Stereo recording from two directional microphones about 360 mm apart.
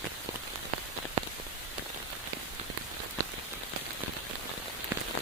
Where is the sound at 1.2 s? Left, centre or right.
Centre.